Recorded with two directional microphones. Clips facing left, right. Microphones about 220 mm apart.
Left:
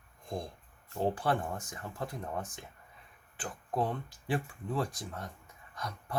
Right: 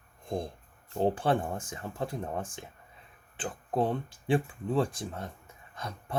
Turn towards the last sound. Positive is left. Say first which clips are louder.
# right 1 dB
turn(degrees=-25)  # may be behind; listen again after turning